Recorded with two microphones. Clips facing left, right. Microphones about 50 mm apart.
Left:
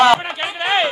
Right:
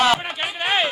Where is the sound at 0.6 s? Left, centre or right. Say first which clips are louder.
Left 3 dB; left.